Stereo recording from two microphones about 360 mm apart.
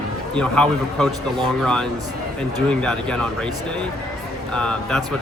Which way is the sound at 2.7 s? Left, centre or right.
Centre.